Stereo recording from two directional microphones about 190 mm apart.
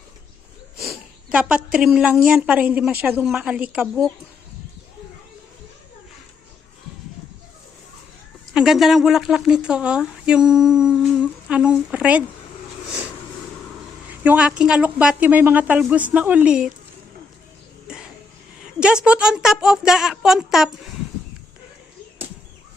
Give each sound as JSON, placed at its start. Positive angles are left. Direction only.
{"t": 0.8, "sound": "a woman's voice", "side_deg": -5}
{"t": 8.5, "sound": "a woman's voice", "side_deg": -5}
{"t": 14.3, "sound": "a woman's voice", "side_deg": -5}
{"t": 17.9, "sound": "cough", "side_deg": -5}
{"t": 18.6, "sound": "a woman's voice", "side_deg": -5}